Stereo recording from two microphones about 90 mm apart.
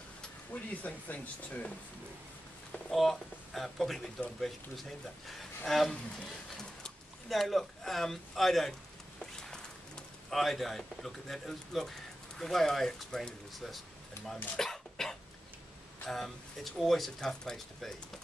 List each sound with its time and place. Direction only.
0.5 s speech: 20° left (ahead or behind)
2.9 s speech: centre (ahead or behind)
9.2 s bird: 5° left (ahead or behind)
12.4 s speech: 5° left (ahead or behind)
14.6 s dog: 5° left (ahead or behind)
16.0 s speech: 5° left (ahead or behind)